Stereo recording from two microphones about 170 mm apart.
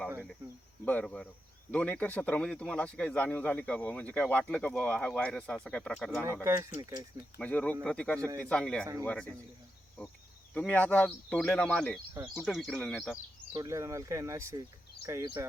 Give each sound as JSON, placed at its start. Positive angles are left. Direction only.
{"t": 0.9, "sound": "speech", "side_deg": 5}
{"t": 6.4, "sound": "speech", "side_deg": -15}
{"t": 7.3, "sound": "speech", "side_deg": 10}
{"t": 10.5, "sound": "speech", "side_deg": 10}
{"t": 13.5, "sound": "speech", "side_deg": -20}